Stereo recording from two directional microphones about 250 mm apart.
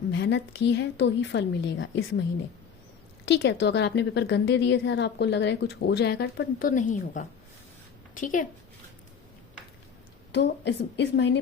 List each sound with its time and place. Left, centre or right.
0.1 s a woman's voice: left
3.2 s a woman's voice: left
10.3 s a woman's voice: left